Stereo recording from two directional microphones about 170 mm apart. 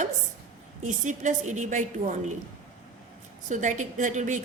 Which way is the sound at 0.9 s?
45° right (ahead or behind).